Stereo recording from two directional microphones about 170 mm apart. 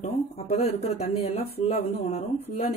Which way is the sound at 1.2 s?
40° left (ahead or behind).